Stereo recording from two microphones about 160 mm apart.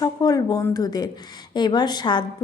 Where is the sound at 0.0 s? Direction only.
25° left (ahead or behind).